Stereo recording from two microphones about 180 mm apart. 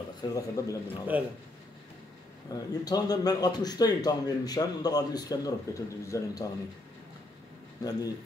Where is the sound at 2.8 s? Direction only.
20° left (ahead or behind).